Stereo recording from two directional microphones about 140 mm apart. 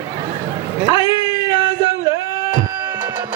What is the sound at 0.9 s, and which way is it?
Cat, 35° left (ahead or behind).